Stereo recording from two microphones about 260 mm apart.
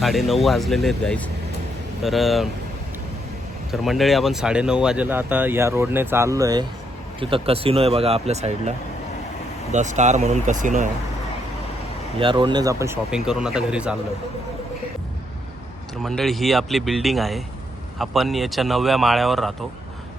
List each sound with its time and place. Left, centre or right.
0.0 s a man's voice: centre
3.7 s speech: centre; by 8.7 s right
9.7 s speech: right
12.2 s a man's voice: centre
16.0 s a man's voice: centre